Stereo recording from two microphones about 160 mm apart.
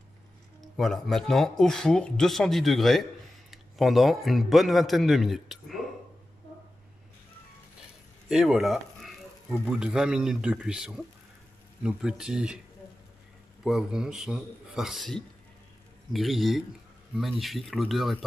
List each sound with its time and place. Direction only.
0.7 s speech: centre (ahead or behind)
8.3 s speech: 5° right (ahead or behind)
13.7 s speech: 5° right (ahead or behind)